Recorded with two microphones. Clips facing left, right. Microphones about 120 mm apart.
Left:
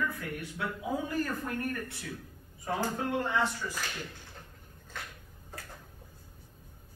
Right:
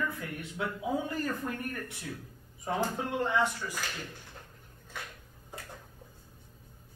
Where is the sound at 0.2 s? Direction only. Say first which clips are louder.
Even; 25° right (ahead or behind).